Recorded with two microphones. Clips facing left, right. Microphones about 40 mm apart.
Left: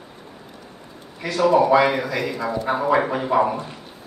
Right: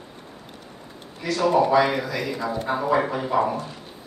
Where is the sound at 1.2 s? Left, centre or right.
Left.